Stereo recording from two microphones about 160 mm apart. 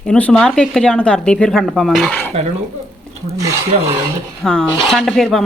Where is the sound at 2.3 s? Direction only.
40° right (ahead or behind).